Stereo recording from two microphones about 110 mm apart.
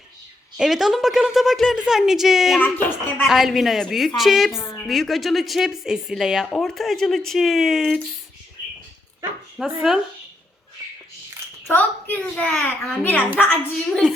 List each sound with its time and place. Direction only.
0.5 s a woman's voice: 5° right (ahead or behind)
2.6 s a child's voice: 15° left (ahead or behind)
3.2 s a woman's voice: centre (ahead or behind)
9.6 s a woman's voice: centre (ahead or behind)
11.7 s a child's voice: 15° left (ahead or behind)